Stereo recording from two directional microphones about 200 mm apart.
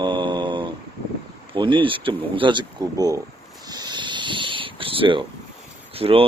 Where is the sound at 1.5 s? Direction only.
25° right (ahead or behind).